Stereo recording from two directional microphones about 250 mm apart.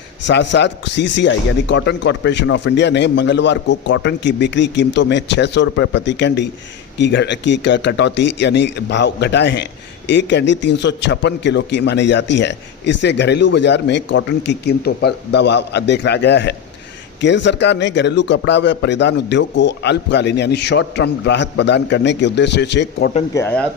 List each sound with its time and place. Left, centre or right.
0.3 s a man's voice: left
23.3 s speech: centre